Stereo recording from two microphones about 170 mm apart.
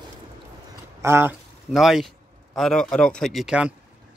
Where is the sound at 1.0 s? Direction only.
15° right (ahead or behind).